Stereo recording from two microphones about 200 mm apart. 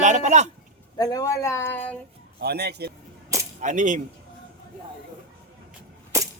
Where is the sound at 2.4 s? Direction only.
55° right (ahead or behind).